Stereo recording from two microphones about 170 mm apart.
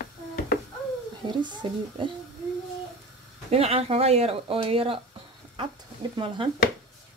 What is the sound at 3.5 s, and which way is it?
Speech, 35° right (ahead or behind).